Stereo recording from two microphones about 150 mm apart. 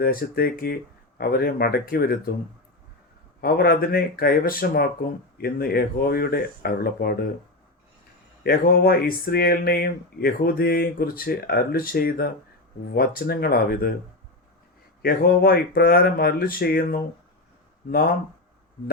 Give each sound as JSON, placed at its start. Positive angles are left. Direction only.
{"t": 0.0, "sound": "speech", "side_deg": 80}
{"t": 3.4, "sound": "speech", "side_deg": 90}
{"t": 8.4, "sound": "speech", "side_deg": 85}
{"t": 15.0, "sound": "speech", "side_deg": 90}